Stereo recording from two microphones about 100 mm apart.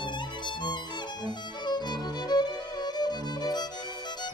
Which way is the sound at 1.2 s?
45° left (ahead or behind).